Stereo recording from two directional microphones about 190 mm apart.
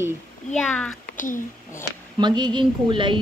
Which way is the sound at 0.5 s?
5° left (ahead or behind).